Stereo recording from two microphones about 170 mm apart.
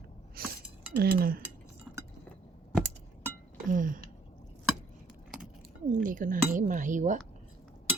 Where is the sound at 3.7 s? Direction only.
50° right (ahead or behind).